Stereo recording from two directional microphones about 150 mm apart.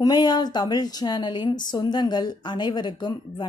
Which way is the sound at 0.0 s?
25° left (ahead or behind).